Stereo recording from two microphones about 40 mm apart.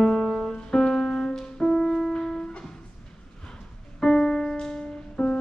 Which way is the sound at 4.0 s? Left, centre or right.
Centre.